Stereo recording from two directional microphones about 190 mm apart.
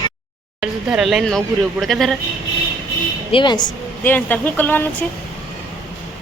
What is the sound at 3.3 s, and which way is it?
Speech, 25° left (ahead or behind).